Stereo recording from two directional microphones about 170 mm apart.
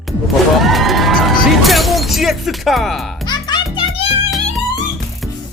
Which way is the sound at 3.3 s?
25° left (ahead or behind).